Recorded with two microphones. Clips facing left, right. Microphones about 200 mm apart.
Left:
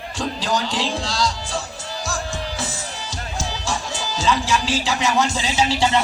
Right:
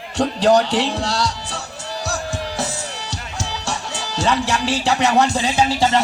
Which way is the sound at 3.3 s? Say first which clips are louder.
Left 1 dB; 65° right (ahead or behind).